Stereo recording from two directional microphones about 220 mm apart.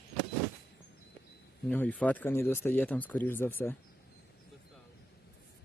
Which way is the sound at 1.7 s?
5° left (ahead or behind).